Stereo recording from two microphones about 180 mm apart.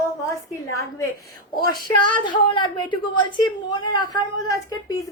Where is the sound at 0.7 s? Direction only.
15° left (ahead or behind).